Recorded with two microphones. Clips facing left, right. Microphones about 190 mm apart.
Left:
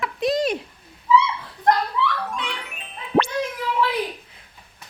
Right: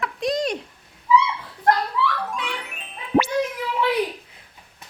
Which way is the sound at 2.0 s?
5° right (ahead or behind).